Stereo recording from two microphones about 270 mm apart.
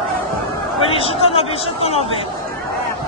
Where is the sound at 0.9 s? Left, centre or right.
Left.